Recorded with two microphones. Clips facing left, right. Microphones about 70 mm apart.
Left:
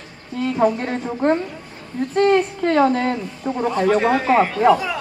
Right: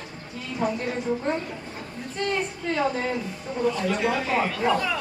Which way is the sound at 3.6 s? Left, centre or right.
Left.